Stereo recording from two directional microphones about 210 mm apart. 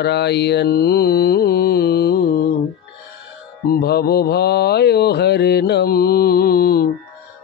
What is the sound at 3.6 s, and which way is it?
Mantra, 50° left (ahead or behind).